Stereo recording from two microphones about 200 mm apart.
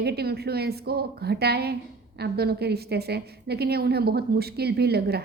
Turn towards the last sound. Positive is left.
turn(degrees=-55)  # may be behind; listen again after turning